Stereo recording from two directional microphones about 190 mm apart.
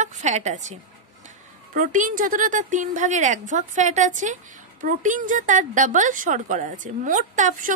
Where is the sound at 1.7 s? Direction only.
45° right (ahead or behind).